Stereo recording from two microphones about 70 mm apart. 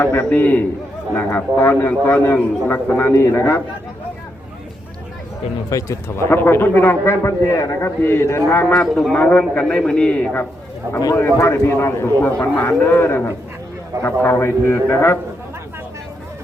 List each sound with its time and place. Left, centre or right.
0.0 s a man's voice: left
5.7 s a man's voice: left
8.7 s a man's voice: centre
9.1 s a man's voice: centre
11.1 s a man's voice: left
12.2 s a man's voice: left